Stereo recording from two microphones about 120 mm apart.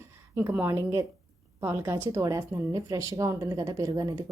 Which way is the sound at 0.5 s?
20° right (ahead or behind).